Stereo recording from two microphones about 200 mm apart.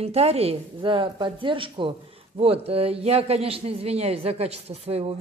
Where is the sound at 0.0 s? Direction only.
30° right (ahead or behind).